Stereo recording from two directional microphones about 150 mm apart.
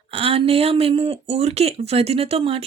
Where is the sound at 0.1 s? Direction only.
40° right (ahead or behind).